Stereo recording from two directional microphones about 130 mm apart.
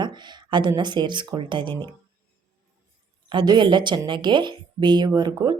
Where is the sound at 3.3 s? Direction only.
35° right (ahead or behind).